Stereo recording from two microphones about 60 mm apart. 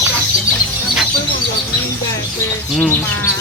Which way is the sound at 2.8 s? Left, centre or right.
Left.